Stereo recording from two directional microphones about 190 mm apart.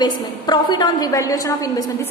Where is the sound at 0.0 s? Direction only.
20° left (ahead or behind).